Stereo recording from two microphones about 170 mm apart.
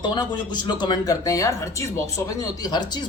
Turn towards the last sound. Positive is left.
turn(degrees=25)  # may be behind; listen again after turning